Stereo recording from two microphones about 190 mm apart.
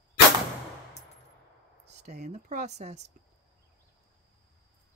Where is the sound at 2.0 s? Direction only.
35° right (ahead or behind).